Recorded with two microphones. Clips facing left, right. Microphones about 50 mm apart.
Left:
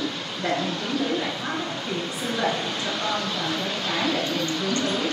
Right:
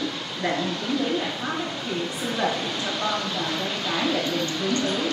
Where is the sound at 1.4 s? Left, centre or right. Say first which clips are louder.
Even; centre.